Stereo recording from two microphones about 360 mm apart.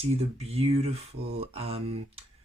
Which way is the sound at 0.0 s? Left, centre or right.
Centre.